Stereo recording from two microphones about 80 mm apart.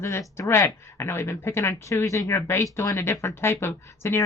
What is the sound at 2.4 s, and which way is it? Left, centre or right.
Speech, left.